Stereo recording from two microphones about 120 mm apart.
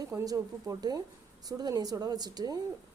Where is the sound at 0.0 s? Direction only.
30° right (ahead or behind).